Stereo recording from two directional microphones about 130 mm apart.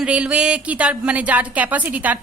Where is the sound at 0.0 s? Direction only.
10° right (ahead or behind).